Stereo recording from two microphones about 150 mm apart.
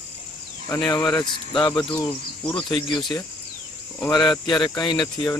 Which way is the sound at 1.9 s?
10° left (ahead or behind).